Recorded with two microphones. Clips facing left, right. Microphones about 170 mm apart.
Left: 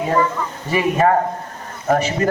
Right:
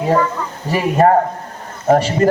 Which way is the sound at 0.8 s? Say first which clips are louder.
Right 3 dB; 35° right (ahead or behind).